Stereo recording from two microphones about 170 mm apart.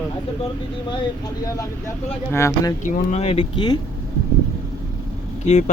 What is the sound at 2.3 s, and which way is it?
Speech, 15° left (ahead or behind).